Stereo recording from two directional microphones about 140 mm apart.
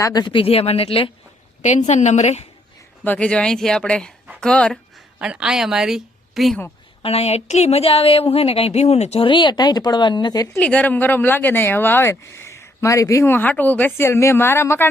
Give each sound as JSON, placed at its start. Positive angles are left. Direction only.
{"t": 0.0, "sound": "speech", "side_deg": 30}
{"t": 1.6, "sound": "a woman's voice", "side_deg": 55}
{"t": 3.0, "sound": "speech", "side_deg": 10}
{"t": 5.2, "sound": "speech", "side_deg": -5}
{"t": 7.0, "sound": "speech", "side_deg": 45}
{"t": 10.6, "sound": "speech", "side_deg": 10}